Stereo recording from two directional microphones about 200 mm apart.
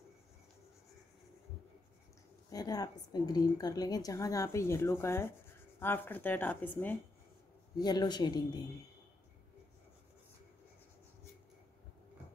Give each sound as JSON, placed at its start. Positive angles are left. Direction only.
{"t": 2.5, "sound": "a woman's voice", "side_deg": 20}
{"t": 7.8, "sound": "speech", "side_deg": 20}